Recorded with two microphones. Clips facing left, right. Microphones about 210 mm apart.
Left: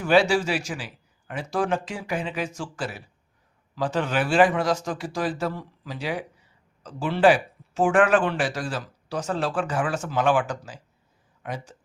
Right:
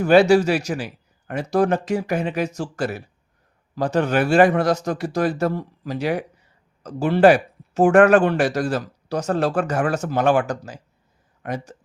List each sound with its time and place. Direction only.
0.0 s speech: 55° right (ahead or behind)
0.3 s a man's voice: 40° right (ahead or behind)
3.8 s speech: 60° right (ahead or behind)
4.0 s speech: 45° right (ahead or behind)
4.4 s speech: 60° right (ahead or behind)
5.4 s a man's voice: 40° right (ahead or behind)